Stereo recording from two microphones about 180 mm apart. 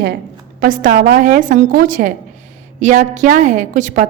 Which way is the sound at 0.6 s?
50° right (ahead or behind).